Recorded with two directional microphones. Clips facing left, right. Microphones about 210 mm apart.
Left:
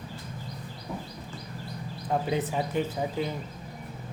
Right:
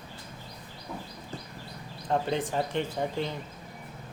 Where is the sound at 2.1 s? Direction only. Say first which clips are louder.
Even; 5° left (ahead or behind).